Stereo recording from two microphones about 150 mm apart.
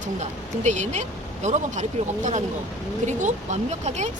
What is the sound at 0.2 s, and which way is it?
Speech, 50° right (ahead or behind).